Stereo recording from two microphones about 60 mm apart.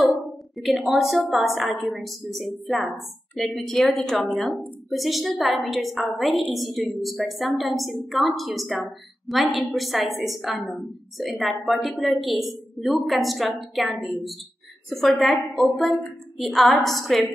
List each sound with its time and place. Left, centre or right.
0.1 s a woman's voice: centre